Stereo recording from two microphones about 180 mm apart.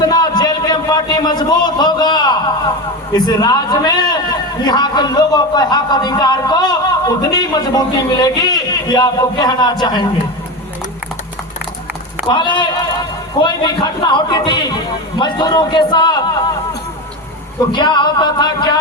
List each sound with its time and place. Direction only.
0.0 s a man's voice: 20° left (ahead or behind)
12.3 s a man's voice: 25° left (ahead or behind)
17.7 s a man's voice: 25° left (ahead or behind)